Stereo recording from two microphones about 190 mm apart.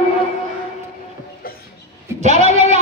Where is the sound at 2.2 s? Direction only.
35° right (ahead or behind).